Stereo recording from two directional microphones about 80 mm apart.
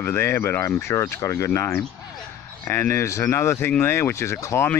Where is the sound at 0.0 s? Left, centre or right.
Left.